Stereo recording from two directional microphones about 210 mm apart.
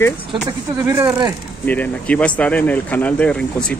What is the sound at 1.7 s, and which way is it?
Speech, 5° left (ahead or behind).